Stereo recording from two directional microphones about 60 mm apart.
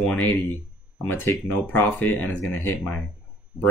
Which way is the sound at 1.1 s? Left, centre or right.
Left.